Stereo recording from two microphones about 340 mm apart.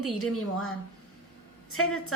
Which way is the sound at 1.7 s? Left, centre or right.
Left.